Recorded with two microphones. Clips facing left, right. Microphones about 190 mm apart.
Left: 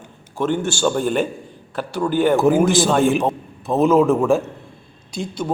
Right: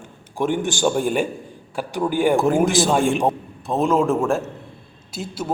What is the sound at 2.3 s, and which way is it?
A man's voice, centre (ahead or behind).